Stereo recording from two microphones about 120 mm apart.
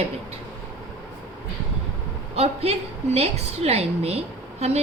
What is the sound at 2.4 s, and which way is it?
A woman's voice, 60° right (ahead or behind).